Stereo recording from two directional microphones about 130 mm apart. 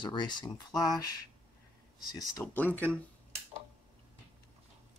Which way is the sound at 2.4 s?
15° left (ahead or behind).